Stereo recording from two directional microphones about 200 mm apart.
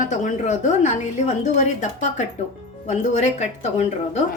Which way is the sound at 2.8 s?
35° left (ahead or behind).